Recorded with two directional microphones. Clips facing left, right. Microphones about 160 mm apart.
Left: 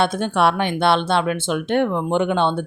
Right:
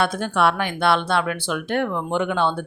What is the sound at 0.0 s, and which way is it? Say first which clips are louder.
Speech: left 2 dB; 25° left (ahead or behind).